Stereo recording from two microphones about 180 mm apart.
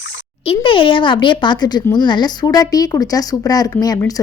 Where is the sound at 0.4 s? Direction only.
30° left (ahead or behind).